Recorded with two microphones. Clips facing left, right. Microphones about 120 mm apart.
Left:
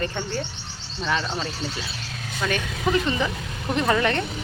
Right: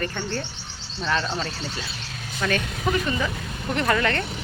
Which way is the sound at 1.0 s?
5° left (ahead or behind).